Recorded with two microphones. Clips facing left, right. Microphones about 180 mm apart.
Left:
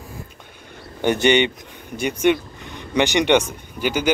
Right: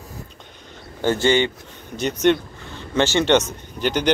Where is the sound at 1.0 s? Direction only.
20° left (ahead or behind).